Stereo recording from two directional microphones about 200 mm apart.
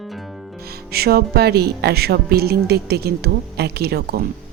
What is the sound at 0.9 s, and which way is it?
Speech, 50° right (ahead or behind).